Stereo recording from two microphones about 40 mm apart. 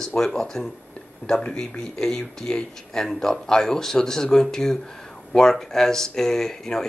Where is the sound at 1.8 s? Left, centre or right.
Centre.